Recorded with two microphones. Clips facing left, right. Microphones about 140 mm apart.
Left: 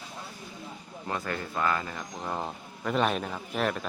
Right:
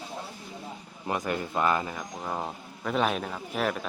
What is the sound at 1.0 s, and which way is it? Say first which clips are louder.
Speech: right 3 dB; 15° right (ahead or behind).